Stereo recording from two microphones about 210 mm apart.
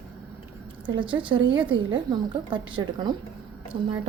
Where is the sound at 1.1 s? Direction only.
25° right (ahead or behind).